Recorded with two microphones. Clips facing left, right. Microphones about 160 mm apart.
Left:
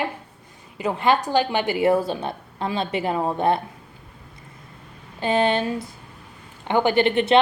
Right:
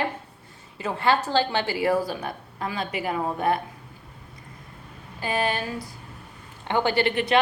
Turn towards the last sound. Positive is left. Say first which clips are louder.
# left 4 dB
turn(degrees=25)  # may be behind; listen again after turning